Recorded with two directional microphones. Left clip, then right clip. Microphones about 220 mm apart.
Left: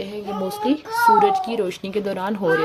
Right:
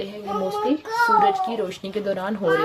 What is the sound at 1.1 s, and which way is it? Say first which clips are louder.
Speech: left 1 dB; 35° left (ahead or behind).